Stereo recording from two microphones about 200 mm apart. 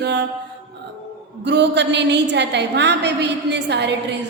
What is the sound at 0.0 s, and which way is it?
Mantra, 60° right (ahead or behind).